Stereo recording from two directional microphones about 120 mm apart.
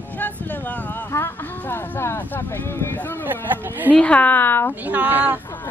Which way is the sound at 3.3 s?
15° right (ahead or behind).